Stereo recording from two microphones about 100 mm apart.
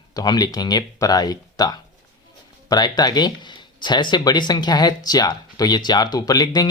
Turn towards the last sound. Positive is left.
turn(degrees=40)  # may be behind; listen again after turning